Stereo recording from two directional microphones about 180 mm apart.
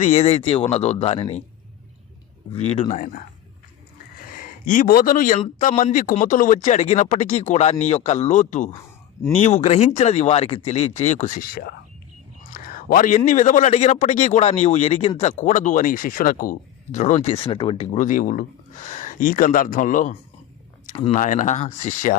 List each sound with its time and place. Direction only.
0.0 s speech: 35° left (ahead or behind)
2.5 s speech: 35° left (ahead or behind)
4.3 s a man's voice: 50° left (ahead or behind)
20.9 s speech: 30° left (ahead or behind)
21.2 s a man's voice: 45° left (ahead or behind)